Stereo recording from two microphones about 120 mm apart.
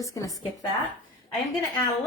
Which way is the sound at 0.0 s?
25° left (ahead or behind).